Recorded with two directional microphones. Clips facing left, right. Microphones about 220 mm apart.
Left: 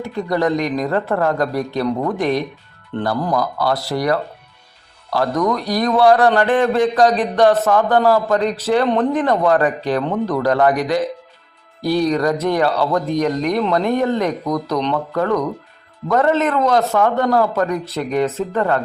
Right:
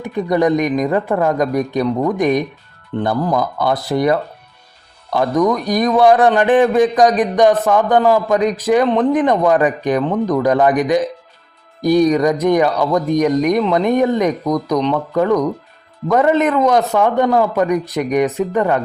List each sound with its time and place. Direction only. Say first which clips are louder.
0.0 s a man's voice: right 3 dB; 20° right (ahead or behind)
2.9 s a man's voice: right 3 dB; 5° right (ahead or behind)
3.3 s a man's voice: right 2 dB; 20° right (ahead or behind)